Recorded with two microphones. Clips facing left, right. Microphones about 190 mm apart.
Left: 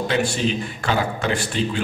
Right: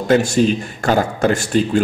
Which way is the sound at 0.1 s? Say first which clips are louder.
Right 10 dB; 45° right (ahead or behind).